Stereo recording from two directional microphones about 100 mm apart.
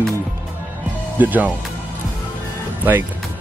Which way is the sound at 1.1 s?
15° right (ahead or behind).